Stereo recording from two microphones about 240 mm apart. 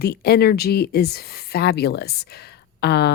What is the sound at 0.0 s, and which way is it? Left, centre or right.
Speech, left.